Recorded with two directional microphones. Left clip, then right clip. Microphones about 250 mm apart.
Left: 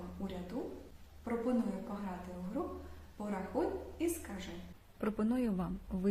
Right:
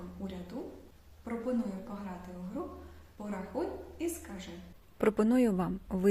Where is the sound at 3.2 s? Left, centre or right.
Centre.